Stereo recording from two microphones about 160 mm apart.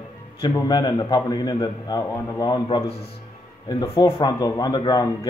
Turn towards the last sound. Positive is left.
turn(degrees=25)  # may be behind; listen again after turning